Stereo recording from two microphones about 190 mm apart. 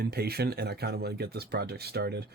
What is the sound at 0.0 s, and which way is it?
Speech, 55° right (ahead or behind).